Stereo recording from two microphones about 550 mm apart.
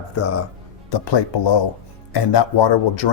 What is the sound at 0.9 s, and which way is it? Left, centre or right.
Speech, left.